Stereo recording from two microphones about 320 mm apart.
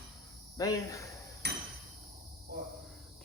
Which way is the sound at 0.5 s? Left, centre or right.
Centre.